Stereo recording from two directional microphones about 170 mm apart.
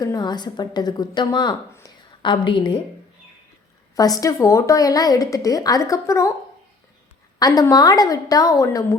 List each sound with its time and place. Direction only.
0.0 s a woman's voice: 25° left (ahead or behind)
3.9 s a woman's voice: 20° left (ahead or behind)
7.3 s a woman's voice: 20° left (ahead or behind)